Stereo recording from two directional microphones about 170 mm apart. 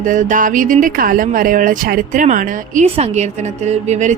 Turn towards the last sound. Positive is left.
turn(degrees=-45)  # may be behind; listen again after turning